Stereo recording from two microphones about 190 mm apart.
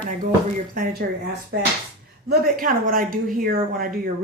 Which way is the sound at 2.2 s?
50° right (ahead or behind).